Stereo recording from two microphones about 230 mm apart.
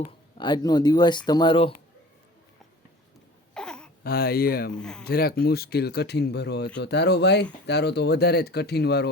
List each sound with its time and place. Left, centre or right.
0.3 s speech: centre
3.5 s a sound: centre
4.0 s speech: left
4.7 s speech: centre
5.0 s speech: left